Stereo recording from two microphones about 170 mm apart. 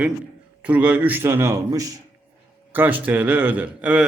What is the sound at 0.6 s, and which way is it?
A man's voice, 10° right (ahead or behind).